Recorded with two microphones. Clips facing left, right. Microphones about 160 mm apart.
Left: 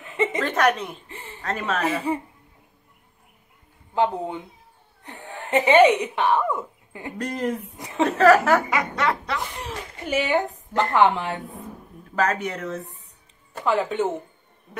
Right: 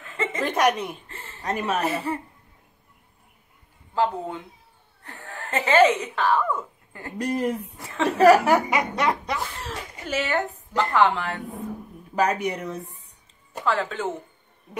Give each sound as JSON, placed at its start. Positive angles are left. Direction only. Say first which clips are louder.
{"t": 0.0, "sound": "a sound", "louder": "left 5 dB", "side_deg": 20}
{"t": 0.4, "sound": "a woman's voice", "louder": "right 2 dB", "side_deg": -15}
{"t": 1.0, "sound": "a sound", "louder": "left 2 dB", "side_deg": 15}
{"t": 1.4, "sound": "speech", "louder": "right 1 dB", "side_deg": -15}
{"t": 2.1, "sound": "speech", "louder": "left 3 dB", "side_deg": 10}
{"t": 3.9, "sound": "a woman's voice", "louder": "left 2 dB", "side_deg": 20}
{"t": 7.2, "sound": "speech", "louder": "right 2 dB", "side_deg": -10}
{"t": 7.7, "sound": "a woman's voice", "louder": "left 2 dB", "side_deg": 15}
{"t": 8.2, "sound": "speech", "louder": "right 1 dB", "side_deg": -15}
{"t": 9.6, "sound": "a sound", "louder": "left 1 dB", "side_deg": 10}
{"t": 10.9, "sound": "a woman's voice", "louder": "left 2 dB", "side_deg": 20}
{"t": 12.2, "sound": "speech", "louder": "right 1 dB", "side_deg": -15}
{"t": 13.7, "sound": "a woman's voice", "louder": "left 3 dB", "side_deg": 20}